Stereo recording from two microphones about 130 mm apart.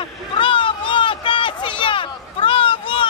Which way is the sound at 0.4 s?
40° left (ahead or behind).